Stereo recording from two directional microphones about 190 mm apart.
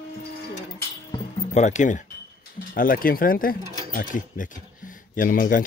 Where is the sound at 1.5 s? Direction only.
40° left (ahead or behind).